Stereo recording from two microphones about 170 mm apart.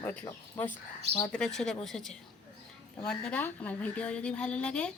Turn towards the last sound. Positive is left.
turn(degrees=5)  # may be behind; listen again after turning